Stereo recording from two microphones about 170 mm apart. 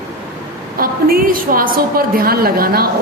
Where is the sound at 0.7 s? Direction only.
60° right (ahead or behind).